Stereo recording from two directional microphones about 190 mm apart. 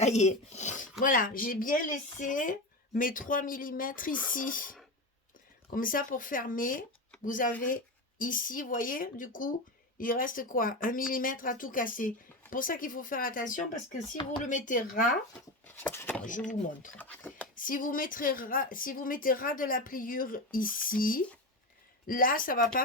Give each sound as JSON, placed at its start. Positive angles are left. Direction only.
{"t": 0.0, "sound": "a woman's voice", "side_deg": 35}
{"t": 15.4, "sound": "speech", "side_deg": 10}
{"t": 16.5, "sound": "a woman's voice", "side_deg": 45}
{"t": 17.0, "sound": "speech", "side_deg": 10}
{"t": 17.5, "sound": "a woman's voice", "side_deg": 45}